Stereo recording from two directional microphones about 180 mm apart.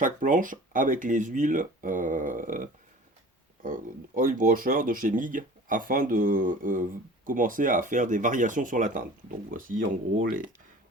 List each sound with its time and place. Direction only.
0.0 s speech: 45° right (ahead or behind)